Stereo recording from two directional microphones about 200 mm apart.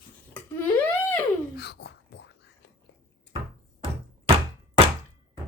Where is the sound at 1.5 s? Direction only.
55° left (ahead or behind).